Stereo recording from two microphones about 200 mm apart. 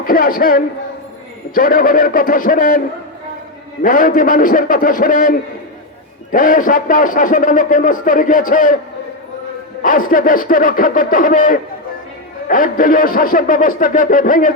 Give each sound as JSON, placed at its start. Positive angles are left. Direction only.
{"t": 0.0, "sound": "a man's voice", "side_deg": 45}
{"t": 3.8, "sound": "a man's voice", "side_deg": 45}
{"t": 9.8, "sound": "a man's voice", "side_deg": 45}